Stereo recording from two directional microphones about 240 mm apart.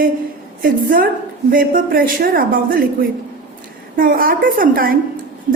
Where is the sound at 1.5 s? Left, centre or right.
Right.